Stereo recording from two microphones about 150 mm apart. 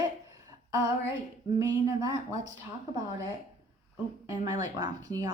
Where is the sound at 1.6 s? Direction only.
25° right (ahead or behind).